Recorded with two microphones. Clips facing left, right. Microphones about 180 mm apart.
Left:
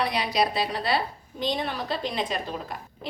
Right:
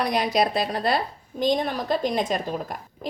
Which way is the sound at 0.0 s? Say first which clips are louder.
Right 3 dB; 45° right (ahead or behind).